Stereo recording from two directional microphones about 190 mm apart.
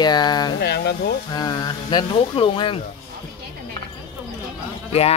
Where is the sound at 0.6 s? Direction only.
60° left (ahead or behind).